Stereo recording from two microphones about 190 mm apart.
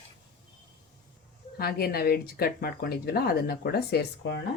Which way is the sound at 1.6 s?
55° left (ahead or behind).